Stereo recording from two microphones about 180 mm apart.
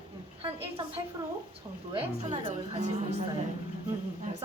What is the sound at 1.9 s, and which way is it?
A woman's voice, 30° right (ahead or behind).